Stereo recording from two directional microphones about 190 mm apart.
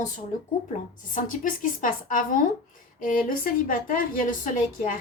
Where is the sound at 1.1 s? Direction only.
45° left (ahead or behind).